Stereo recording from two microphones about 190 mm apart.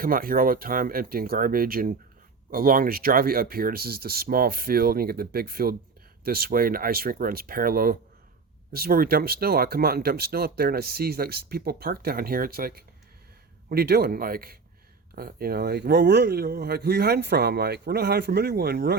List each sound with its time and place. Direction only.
0.0 s speech: 50° right (ahead or behind)